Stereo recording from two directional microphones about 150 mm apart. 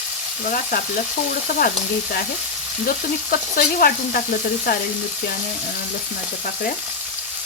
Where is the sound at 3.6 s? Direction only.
75° left (ahead or behind).